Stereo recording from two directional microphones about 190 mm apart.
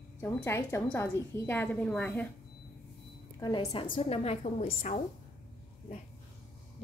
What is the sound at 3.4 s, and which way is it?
A woman's voice, 25° left (ahead or behind).